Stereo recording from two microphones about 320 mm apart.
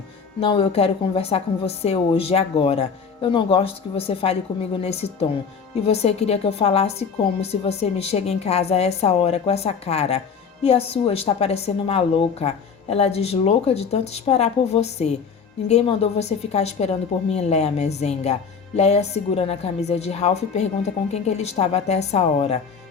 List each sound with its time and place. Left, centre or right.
0.3 s a woman's voice: centre